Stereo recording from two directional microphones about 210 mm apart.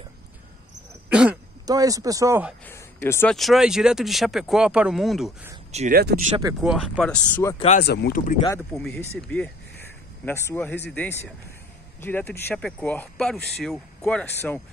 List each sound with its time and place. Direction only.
1.1 s throat clearing: 5° right (ahead or behind)
1.7 s speech: 15° right (ahead or behind)
2.6 s speech: 10° left (ahead or behind)
3.3 s speech: centre (ahead or behind)
5.7 s speech: 30° right (ahead or behind)
5.9 s speech: 45° right (ahead or behind)
6.6 s speech: centre (ahead or behind)
7.5 s speech: 30° left (ahead or behind)
7.8 s speech: 50° left (ahead or behind)
8.7 s speech: 5° left (ahead or behind)